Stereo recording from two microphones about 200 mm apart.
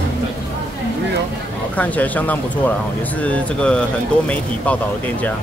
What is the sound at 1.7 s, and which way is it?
Speech, 10° left (ahead or behind).